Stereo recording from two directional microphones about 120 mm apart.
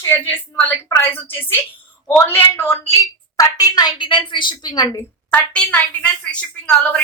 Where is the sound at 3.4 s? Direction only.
35° left (ahead or behind).